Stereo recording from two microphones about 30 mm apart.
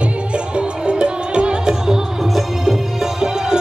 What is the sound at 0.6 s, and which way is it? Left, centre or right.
Music, right.